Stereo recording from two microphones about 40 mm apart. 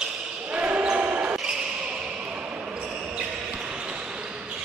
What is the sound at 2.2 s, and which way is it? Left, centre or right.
Basketball bounce, right.